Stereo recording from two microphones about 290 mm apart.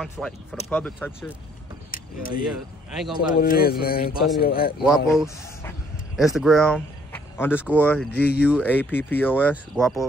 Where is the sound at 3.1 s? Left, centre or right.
Left.